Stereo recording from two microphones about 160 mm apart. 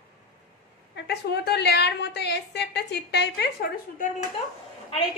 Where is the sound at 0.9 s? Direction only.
90° left.